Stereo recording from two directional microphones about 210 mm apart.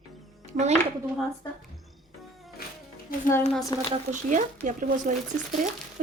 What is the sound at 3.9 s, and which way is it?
A woman's voice, 35° right (ahead or behind).